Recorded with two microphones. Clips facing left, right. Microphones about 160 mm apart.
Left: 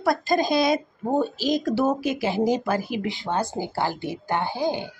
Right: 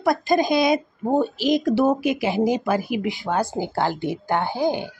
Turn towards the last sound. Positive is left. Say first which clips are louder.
# right 3 dB
turn(degrees=-15)  # may be behind; listen again after turning